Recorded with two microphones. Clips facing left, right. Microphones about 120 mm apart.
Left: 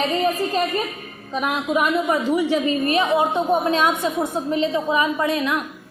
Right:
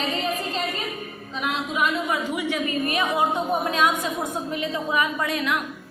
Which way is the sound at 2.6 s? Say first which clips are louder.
Left 5 dB; 25° left (ahead or behind).